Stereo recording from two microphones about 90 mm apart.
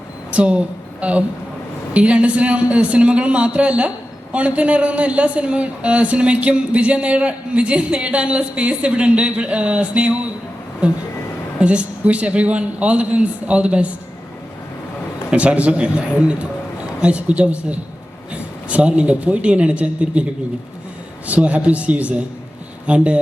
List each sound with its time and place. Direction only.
0.3 s a woman's voice: 15° right (ahead or behind)
1.9 s a man's voice: 15° right (ahead or behind)
11.6 s a man's voice: 15° right (ahead or behind)
15.3 s a man's voice: 15° right (ahead or behind)
21.2 s a man's voice: 15° right (ahead or behind)